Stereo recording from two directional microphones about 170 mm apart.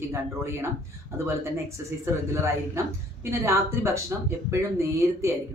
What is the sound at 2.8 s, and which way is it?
Speech, 15° right (ahead or behind).